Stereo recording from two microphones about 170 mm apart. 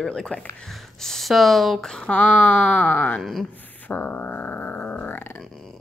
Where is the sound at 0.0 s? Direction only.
5° left (ahead or behind).